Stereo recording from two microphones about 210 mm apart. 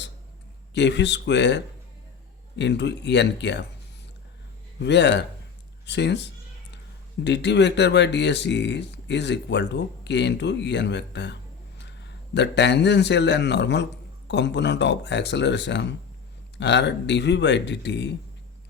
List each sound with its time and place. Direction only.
0.7 s speech: 55° left (ahead or behind)
4.8 s speech: 55° left (ahead or behind)
7.3 s a man's voice: 55° left (ahead or behind)